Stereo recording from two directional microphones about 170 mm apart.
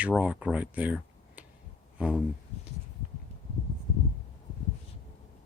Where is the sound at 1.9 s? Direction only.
5° right (ahead or behind).